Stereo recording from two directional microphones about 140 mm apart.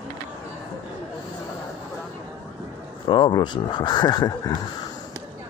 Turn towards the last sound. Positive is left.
turn(degrees=30)  # may be behind; listen again after turning